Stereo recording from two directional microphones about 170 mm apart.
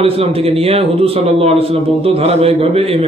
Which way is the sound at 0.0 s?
35° right (ahead or behind).